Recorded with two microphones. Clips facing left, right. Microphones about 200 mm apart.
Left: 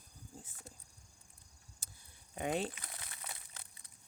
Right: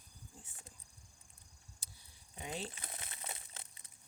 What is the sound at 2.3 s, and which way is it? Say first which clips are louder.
Speech: left 8 dB; 60° left (ahead or behind).